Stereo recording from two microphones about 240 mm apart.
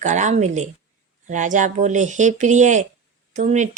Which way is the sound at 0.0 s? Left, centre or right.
Right.